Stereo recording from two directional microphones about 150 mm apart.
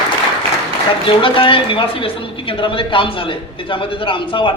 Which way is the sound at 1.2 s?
35° left (ahead or behind).